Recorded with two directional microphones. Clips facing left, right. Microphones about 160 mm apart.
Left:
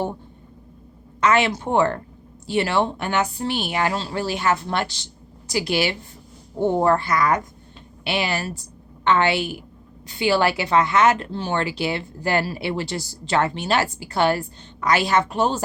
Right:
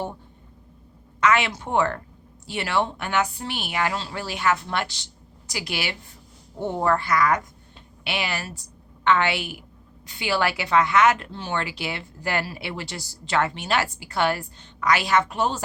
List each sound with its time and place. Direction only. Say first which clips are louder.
1.2 s a woman's voice: left 3 dB; 35° left (ahead or behind)